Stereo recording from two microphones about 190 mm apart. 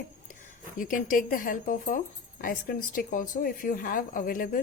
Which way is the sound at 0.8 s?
45° left (ahead or behind).